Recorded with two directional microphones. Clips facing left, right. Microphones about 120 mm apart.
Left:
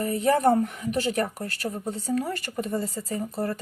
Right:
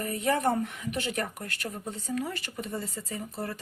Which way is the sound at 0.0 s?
30° left (ahead or behind).